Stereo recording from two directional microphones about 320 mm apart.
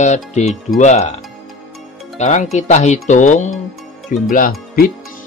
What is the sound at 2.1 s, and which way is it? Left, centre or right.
Speech, left.